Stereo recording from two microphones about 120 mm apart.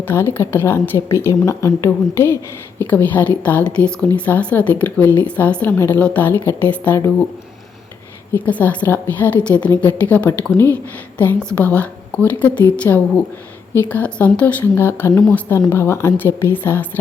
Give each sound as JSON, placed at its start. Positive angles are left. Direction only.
{"t": 0.0, "sound": "a woman's voice", "side_deg": 20}
{"t": 8.3, "sound": "a woman's voice", "side_deg": 15}